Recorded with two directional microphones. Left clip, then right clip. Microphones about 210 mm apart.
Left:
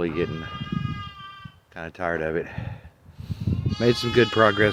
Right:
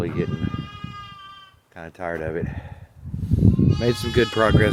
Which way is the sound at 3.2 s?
15° left (ahead or behind).